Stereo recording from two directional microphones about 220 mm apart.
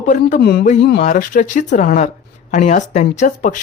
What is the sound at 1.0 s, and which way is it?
A man's voice, 35° left (ahead or behind).